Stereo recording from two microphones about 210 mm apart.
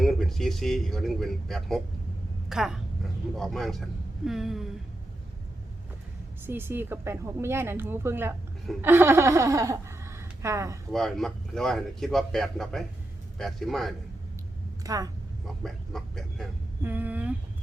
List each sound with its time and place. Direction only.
0.0 s speech: centre (ahead or behind)
6.4 s speech: 10° right (ahead or behind)
10.9 s speech: centre (ahead or behind)
14.8 s speech: 15° right (ahead or behind)
15.6 s speech: centre (ahead or behind)